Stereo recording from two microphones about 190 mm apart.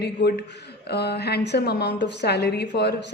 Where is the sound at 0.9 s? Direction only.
60° left (ahead or behind).